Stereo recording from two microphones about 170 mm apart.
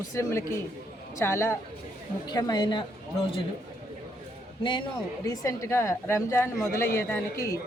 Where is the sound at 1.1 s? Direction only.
15° left (ahead or behind).